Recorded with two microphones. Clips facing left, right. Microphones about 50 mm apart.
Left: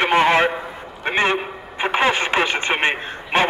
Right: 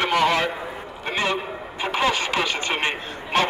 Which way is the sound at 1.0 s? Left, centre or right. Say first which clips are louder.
Left 5 dB; left.